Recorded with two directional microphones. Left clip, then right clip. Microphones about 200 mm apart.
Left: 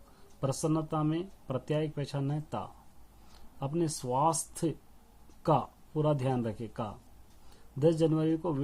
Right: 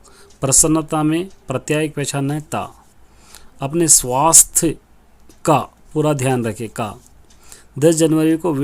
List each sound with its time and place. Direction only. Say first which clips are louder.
0.3 s speech: right 15 dB; 40° right (ahead or behind)